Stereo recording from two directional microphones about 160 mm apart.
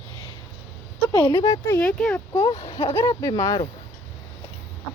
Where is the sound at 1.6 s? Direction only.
10° left (ahead or behind).